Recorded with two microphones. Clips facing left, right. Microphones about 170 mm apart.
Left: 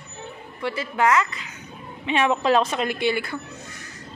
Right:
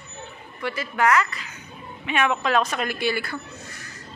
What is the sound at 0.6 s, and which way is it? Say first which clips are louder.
Speech: left 1 dB; 25° left (ahead or behind).